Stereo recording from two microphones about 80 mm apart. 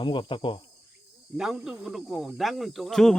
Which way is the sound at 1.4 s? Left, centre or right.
Centre.